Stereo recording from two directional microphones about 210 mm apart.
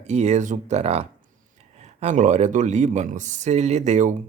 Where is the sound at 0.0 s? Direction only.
30° right (ahead or behind).